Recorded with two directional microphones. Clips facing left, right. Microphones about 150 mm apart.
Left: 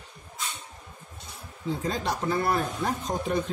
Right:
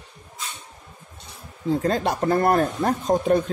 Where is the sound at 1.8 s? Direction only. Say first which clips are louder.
Right 5 dB; 60° right (ahead or behind).